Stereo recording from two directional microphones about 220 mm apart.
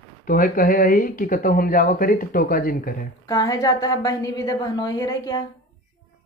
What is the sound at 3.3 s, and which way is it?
A woman's voice, 15° left (ahead or behind).